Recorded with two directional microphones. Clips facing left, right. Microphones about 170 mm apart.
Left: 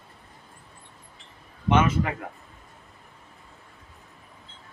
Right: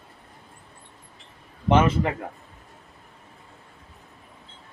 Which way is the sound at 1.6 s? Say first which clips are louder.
Right 2 dB; 30° right (ahead or behind).